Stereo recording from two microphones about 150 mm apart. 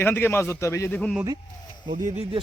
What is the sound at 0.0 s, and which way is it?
A man's voice, 15° left (ahead or behind).